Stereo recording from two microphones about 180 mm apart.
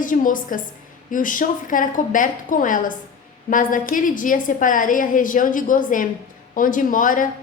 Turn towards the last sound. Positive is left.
turn(degrees=45)  # may be behind; listen again after turning